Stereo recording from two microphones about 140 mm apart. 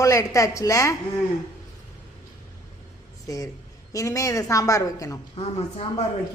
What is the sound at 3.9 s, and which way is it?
Speech, 25° left (ahead or behind).